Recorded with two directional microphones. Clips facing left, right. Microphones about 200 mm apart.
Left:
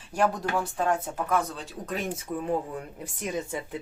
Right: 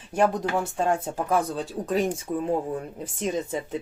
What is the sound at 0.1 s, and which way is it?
Speech, 20° right (ahead or behind).